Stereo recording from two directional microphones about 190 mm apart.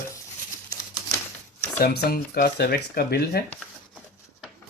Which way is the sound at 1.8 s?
55° left (ahead or behind).